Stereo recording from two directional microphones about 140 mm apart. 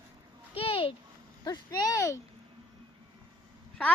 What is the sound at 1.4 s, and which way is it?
Speech, 30° left (ahead or behind).